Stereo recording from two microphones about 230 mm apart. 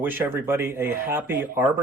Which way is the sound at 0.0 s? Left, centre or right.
Centre.